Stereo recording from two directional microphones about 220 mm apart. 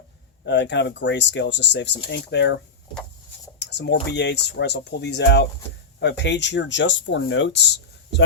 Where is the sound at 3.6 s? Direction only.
50° left (ahead or behind).